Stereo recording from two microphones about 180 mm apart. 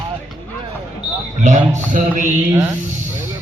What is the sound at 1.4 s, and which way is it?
Speech, 45° right (ahead or behind).